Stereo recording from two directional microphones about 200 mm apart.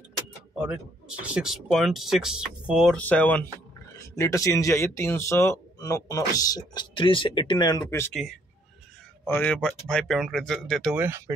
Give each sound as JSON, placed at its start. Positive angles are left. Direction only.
{"t": 1.2, "sound": "speech", "side_deg": -5}
{"t": 3.0, "sound": "speech", "side_deg": 10}
{"t": 8.1, "sound": "speech", "side_deg": 0}
{"t": 9.2, "sound": "speech", "side_deg": 10}
{"t": 11.0, "sound": "speech", "side_deg": -10}